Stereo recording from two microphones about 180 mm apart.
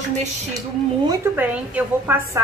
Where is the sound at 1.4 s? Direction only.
10° right (ahead or behind).